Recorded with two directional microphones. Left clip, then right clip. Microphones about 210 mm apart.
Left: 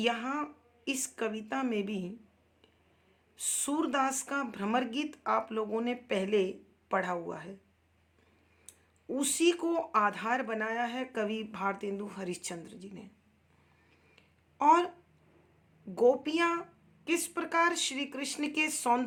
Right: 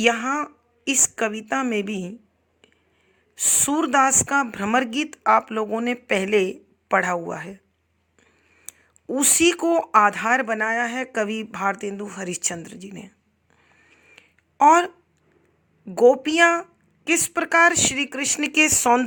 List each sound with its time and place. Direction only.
0.0 s speech: 40° right (ahead or behind)
3.3 s speech: 40° right (ahead or behind)
8.7 s clicking: 40° right (ahead or behind)
9.0 s speech: 40° right (ahead or behind)
13.9 s a sound: 40° right (ahead or behind)
16.0 s speech: 40° right (ahead or behind)